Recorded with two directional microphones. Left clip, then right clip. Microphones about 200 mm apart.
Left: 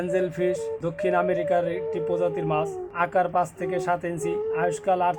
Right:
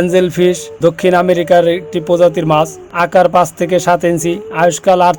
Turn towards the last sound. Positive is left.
turn(degrees=-40)  # may be behind; listen again after turning